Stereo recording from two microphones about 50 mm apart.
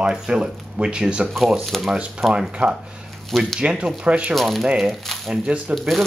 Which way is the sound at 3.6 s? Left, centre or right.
Right.